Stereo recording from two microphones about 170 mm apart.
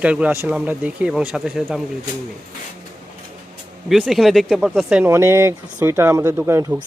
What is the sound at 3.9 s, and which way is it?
Speech, centre (ahead or behind).